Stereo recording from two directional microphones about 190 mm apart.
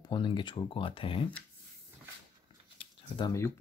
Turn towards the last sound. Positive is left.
turn(degrees=15)  # may be behind; listen again after turning